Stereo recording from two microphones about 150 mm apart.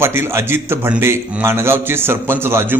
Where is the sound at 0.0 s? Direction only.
15° right (ahead or behind).